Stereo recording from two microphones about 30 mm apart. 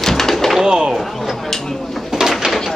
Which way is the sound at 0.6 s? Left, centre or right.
Right.